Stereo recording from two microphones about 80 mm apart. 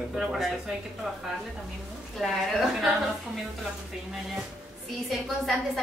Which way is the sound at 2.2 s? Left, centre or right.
Centre.